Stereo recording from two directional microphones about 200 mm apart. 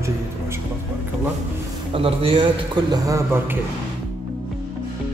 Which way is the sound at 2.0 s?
25° right (ahead or behind).